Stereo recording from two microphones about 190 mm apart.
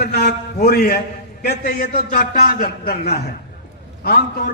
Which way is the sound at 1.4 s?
50° left (ahead or behind).